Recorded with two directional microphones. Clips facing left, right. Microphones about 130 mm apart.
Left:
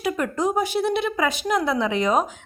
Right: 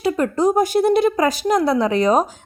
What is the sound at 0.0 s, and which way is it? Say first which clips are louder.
A woman's voice: right 6 dB; 30° right (ahead or behind).